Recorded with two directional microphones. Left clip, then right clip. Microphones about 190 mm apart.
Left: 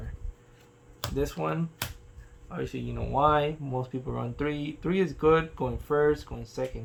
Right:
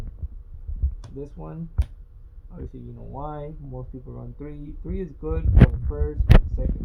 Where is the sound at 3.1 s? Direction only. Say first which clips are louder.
Left 11 dB; 35° left (ahead or behind).